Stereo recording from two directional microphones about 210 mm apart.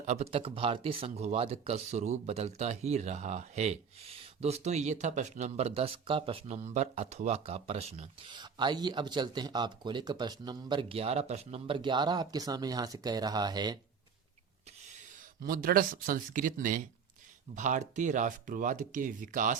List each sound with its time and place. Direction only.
0.0 s speech: 30° right (ahead or behind)
15.4 s speech: 40° right (ahead or behind)